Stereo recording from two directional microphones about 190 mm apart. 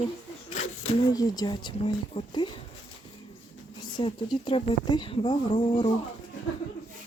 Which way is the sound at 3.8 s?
25° left (ahead or behind).